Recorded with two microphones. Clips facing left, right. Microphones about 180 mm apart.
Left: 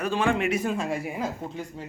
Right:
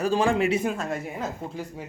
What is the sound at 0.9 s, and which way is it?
Speech, 10° left (ahead or behind).